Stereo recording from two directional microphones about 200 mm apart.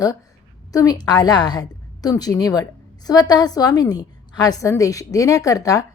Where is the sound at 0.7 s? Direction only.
15° left (ahead or behind).